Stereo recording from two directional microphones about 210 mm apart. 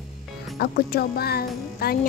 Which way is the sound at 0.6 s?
45° left (ahead or behind).